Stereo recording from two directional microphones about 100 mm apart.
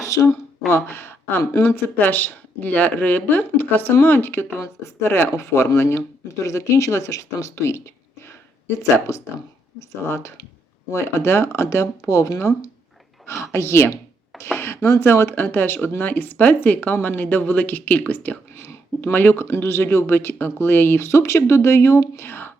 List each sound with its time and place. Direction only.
0.1 s speech: 35° left (ahead or behind)
0.9 s speech: 20° left (ahead or behind)
8.8 s speech: 30° left (ahead or behind)